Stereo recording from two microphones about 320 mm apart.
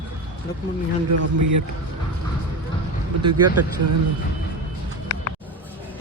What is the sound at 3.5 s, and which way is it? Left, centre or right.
Speech, right.